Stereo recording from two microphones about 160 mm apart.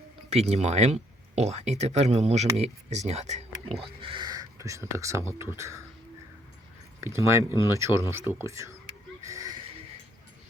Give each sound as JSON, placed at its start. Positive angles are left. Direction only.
{"t": 0.3, "sound": "speech", "side_deg": -40}
{"t": 7.0, "sound": "speech", "side_deg": -15}
{"t": 9.2, "sound": "a sound", "side_deg": -20}